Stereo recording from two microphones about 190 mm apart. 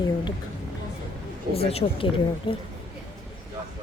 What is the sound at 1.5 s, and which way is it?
Speech, 30° left (ahead or behind).